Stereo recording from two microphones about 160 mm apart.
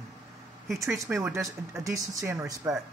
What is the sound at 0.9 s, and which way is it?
Speech, 15° right (ahead or behind).